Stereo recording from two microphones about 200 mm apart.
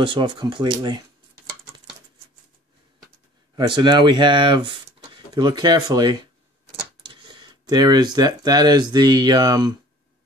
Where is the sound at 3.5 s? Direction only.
20° right (ahead or behind).